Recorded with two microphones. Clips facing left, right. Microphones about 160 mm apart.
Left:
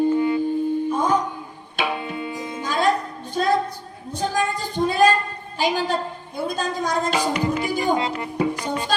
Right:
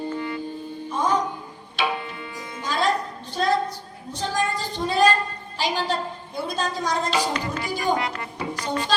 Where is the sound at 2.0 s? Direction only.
20° left (ahead or behind).